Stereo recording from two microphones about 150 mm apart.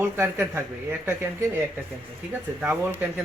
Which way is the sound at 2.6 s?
10° right (ahead or behind).